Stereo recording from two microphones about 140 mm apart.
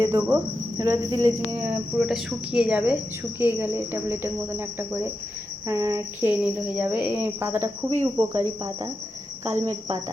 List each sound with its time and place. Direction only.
0.0 s cricket: 20° right (ahead or behind)
1.7 s cricket: 5° right (ahead or behind); by 8.9 s 20° right (ahead or behind)
9.4 s cricket: 55° right (ahead or behind)